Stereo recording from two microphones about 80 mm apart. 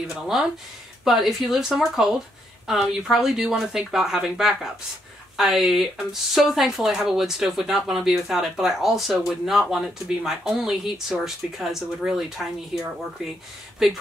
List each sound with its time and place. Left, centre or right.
0.1 s speech: centre